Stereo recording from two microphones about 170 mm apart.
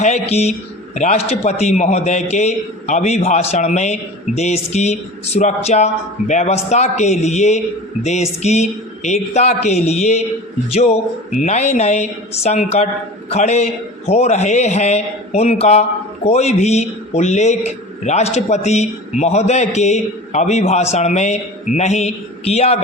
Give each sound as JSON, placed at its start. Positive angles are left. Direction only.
{"t": 0.0, "sound": "a man's voice", "side_deg": 40}